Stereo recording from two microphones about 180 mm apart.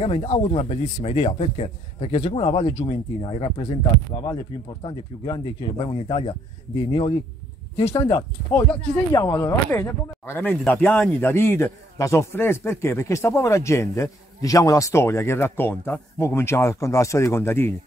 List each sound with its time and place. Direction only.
0.0 s a man's voice: 35° left (ahead or behind)
9.1 s speech: 20° left (ahead or behind)